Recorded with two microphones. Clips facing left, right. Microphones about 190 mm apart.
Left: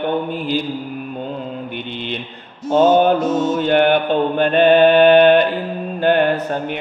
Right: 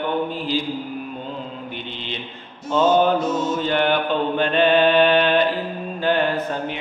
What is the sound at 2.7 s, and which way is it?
Mantra, 50° left (ahead or behind).